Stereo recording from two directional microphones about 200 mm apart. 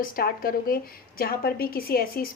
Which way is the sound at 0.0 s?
45° left (ahead or behind).